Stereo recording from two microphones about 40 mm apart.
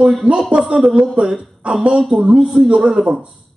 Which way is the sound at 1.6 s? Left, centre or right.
Right.